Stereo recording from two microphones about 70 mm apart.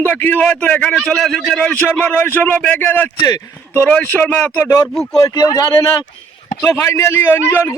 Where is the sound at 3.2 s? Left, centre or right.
Left.